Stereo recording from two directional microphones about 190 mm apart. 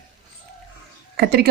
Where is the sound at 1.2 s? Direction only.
55° right (ahead or behind).